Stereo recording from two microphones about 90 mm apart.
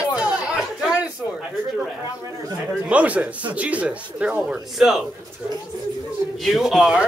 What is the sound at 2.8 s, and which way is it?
Speech, 15° right (ahead or behind).